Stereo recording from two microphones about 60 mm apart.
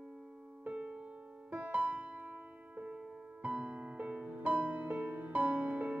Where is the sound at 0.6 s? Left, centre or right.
Right.